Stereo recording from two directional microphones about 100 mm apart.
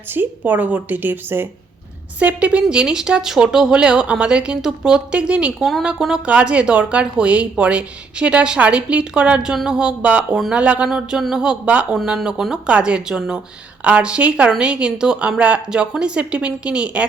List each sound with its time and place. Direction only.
0.1 s a woman's voice: 20° right (ahead or behind)
10.3 s speech: centre (ahead or behind)
10.6 s speech: 10° right (ahead or behind)